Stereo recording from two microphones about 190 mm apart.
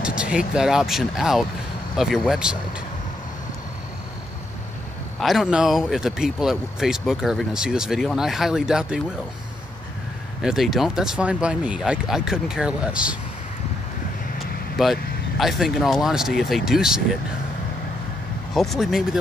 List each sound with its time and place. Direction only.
0.0 s speech: 5° right (ahead or behind)
5.2 s speech: centre (ahead or behind)
10.4 s speech: centre (ahead or behind)
14.8 s speech: centre (ahead or behind)
18.5 s speech: centre (ahead or behind)